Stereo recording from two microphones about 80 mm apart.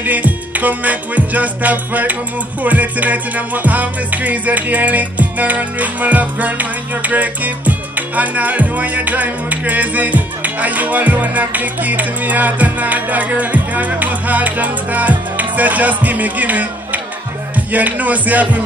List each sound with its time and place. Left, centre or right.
0.0 s music: right